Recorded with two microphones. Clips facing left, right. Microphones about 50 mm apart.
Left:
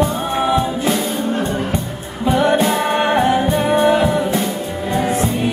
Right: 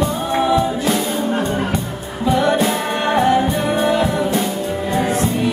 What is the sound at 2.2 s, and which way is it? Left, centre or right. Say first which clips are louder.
Music: left 1 dB; centre.